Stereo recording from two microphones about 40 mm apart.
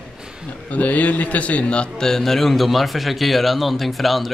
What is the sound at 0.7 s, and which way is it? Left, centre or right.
A man's voice, left.